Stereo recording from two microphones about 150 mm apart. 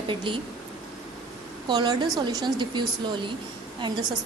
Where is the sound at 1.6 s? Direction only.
30° right (ahead or behind).